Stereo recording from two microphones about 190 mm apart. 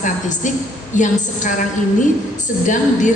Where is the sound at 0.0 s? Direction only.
40° left (ahead or behind).